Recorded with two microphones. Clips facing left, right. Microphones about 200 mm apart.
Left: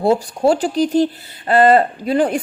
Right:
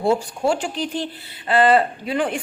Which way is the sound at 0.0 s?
40° left (ahead or behind).